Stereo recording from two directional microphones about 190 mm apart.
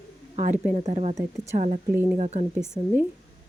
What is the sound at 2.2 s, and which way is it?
Speech, 40° right (ahead or behind).